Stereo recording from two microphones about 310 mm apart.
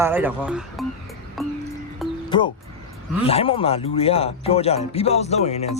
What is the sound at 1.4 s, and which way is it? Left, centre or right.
Music, centre.